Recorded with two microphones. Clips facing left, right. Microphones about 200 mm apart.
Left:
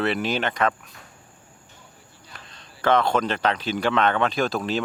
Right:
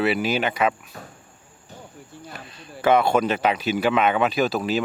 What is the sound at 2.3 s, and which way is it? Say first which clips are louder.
Speech: right 8 dB; 10° right (ahead or behind).